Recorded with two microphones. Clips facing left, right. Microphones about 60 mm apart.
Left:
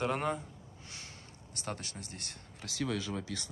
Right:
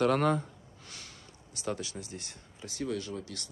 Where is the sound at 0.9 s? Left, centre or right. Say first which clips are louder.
Right 1 dB; left.